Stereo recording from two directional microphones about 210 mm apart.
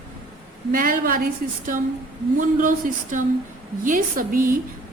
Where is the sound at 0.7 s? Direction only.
40° right (ahead or behind).